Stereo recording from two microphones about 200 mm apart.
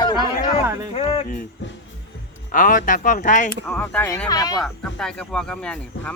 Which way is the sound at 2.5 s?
40° left (ahead or behind).